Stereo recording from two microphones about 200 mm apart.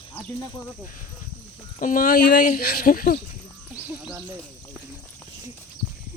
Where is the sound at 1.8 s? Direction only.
45° left (ahead or behind).